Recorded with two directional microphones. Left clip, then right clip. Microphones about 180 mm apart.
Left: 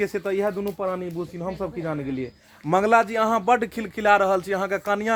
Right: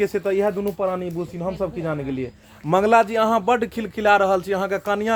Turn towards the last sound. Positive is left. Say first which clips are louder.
# right 2 dB
turn(degrees=25)  # may be behind; listen again after turning